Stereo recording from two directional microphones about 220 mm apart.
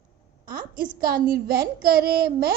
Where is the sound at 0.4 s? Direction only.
40° right (ahead or behind).